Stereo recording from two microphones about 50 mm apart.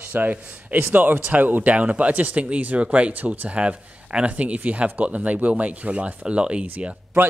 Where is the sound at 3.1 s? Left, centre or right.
Right.